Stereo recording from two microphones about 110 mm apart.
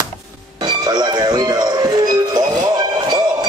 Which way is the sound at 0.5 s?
40° right (ahead or behind).